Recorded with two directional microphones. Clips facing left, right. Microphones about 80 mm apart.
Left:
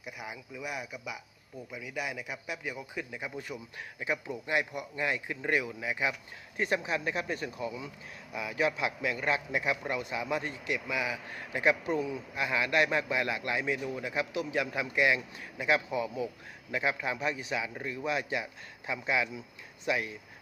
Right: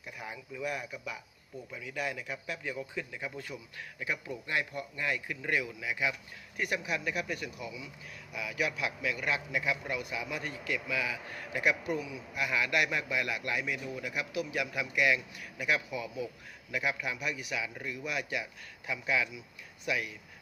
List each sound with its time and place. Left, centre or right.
0.0 s a man's voice: centre; by 20.1 s left